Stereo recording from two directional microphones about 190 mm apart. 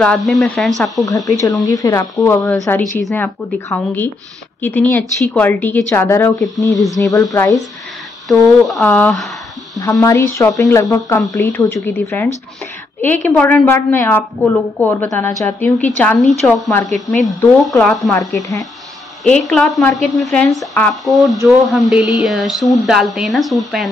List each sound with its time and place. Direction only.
0.0 s speech: centre (ahead or behind)
1.0 s a woman's voice: 20° left (ahead or behind)
3.6 s a woman's voice: 10° left (ahead or behind)
8.3 s speech: centre (ahead or behind)
9.8 s a woman's voice: 15° left (ahead or behind); by 18.1 s centre (ahead or behind)
18.1 s a woman's voice: 15° left (ahead or behind)
19.5 s speech: 5° left (ahead or behind)